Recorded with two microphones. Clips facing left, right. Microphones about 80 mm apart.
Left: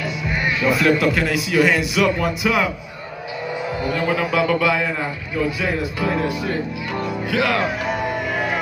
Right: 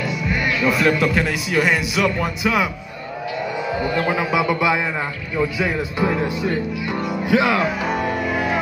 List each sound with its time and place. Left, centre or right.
0.7 s a man's voice: centre
4.1 s speech: centre